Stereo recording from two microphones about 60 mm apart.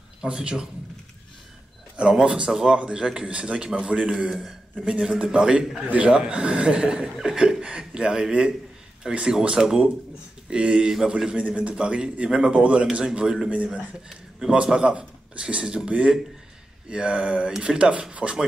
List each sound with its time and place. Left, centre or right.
0.2 s speech: centre
2.0 s a man's voice: centre